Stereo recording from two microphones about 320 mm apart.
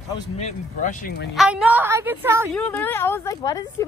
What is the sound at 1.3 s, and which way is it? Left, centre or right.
A woman's voice, centre.